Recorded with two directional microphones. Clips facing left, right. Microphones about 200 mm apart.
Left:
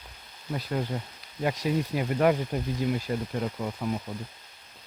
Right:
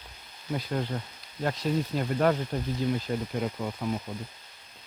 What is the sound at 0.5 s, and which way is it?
Speech, 5° left (ahead or behind).